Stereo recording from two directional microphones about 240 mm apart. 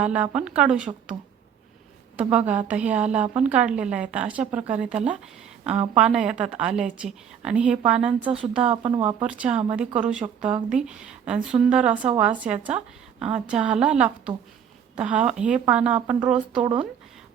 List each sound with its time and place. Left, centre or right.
0.0 s a woman's voice: centre
2.5 s a woman's voice: centre
5.7 s speech: right
6.0 s a woman's voice: centre
8.6 s speech: right
9.2 s a woman's voice: centre